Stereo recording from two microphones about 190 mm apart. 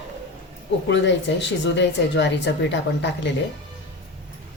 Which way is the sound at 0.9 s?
70° left (ahead or behind).